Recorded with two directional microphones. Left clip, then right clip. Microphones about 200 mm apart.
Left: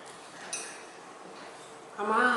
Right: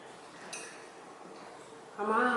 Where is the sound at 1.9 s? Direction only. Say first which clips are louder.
Left 3 dB; 10° right (ahead or behind).